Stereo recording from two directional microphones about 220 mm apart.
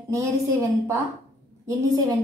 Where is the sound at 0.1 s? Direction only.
15° right (ahead or behind).